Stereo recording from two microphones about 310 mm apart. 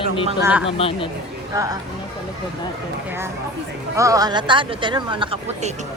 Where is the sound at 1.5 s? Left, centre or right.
Centre.